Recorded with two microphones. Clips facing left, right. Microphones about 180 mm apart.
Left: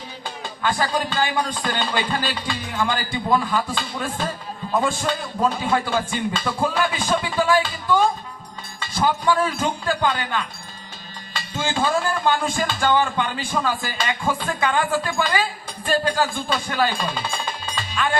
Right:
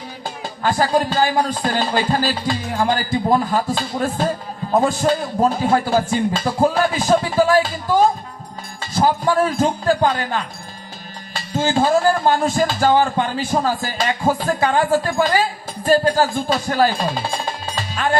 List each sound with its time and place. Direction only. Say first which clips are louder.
0.4 s a man's voice: right 4 dB; 40° right (ahead or behind)